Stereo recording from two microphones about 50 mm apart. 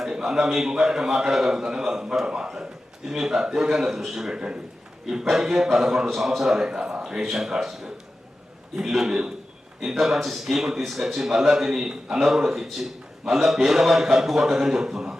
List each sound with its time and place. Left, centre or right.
0.0 s a man's voice: centre
7.3 s a man's voice: centre